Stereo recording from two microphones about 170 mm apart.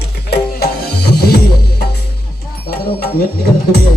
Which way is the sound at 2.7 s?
65° left (ahead or behind).